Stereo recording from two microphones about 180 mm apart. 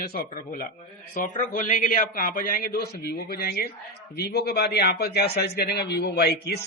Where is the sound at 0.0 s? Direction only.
55° left (ahead or behind).